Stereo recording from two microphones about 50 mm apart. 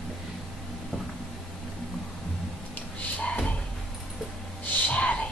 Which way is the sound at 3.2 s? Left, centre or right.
Left.